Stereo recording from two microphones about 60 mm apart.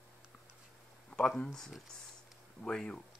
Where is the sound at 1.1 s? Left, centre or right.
Centre.